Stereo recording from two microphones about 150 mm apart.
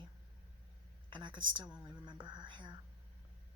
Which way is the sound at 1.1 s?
30° right (ahead or behind).